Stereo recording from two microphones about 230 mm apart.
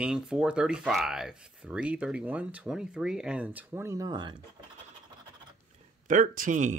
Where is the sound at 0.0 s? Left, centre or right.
Centre.